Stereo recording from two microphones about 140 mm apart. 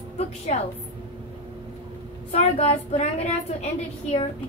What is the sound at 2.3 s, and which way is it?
Speech, 50° left (ahead or behind).